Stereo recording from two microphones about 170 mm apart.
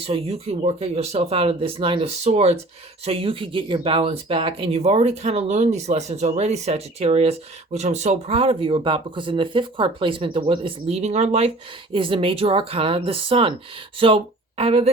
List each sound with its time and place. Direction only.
0.0 s speech: 35° right (ahead or behind)